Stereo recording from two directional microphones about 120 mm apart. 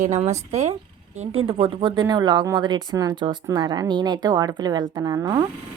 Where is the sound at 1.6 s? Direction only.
45° right (ahead or behind); by 5.4 s 30° right (ahead or behind).